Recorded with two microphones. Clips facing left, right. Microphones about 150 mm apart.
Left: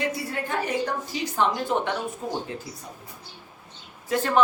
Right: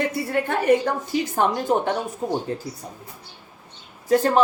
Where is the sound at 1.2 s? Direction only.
50° right (ahead or behind).